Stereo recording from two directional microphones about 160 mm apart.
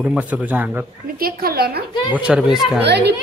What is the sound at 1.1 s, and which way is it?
Speech, 70° right (ahead or behind).